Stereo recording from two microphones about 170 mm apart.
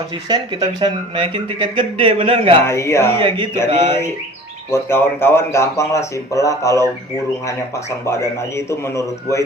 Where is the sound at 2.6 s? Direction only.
15° left (ahead or behind).